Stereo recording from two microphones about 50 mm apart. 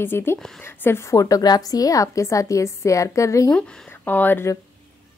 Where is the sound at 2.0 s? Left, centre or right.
Left.